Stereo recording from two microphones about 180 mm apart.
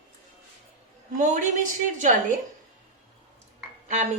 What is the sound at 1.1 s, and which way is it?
A woman's voice, 45° right (ahead or behind).